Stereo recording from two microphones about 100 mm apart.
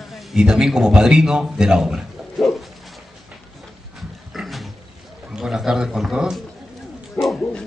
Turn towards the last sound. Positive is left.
turn(degrees=5)  # may be behind; listen again after turning